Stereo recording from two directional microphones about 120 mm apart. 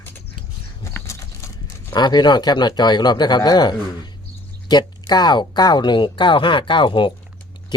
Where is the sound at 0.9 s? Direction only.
25° left (ahead or behind).